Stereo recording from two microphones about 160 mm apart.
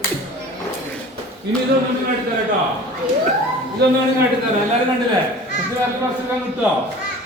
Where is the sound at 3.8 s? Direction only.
90° right.